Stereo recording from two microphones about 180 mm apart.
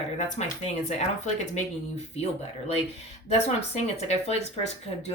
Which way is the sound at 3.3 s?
35° left (ahead or behind).